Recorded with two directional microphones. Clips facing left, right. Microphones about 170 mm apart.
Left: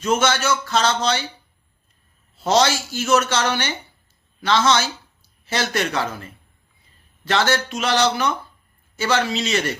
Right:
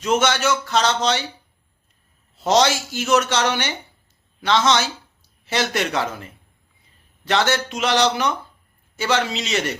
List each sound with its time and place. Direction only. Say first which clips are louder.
0.0 s speech: right 1 dB; 20° right (ahead or behind)
2.3 s a woman's voice: right 1 dB; 20° right (ahead or behind)